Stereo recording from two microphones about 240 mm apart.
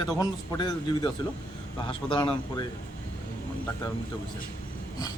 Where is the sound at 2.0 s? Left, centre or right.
Centre.